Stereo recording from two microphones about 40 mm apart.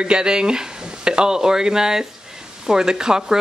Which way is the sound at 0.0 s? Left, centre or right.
Right.